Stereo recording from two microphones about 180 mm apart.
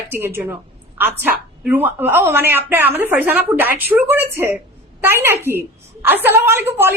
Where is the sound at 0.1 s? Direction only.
10° right (ahead or behind).